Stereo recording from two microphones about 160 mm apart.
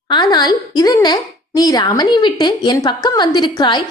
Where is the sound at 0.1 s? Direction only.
25° left (ahead or behind).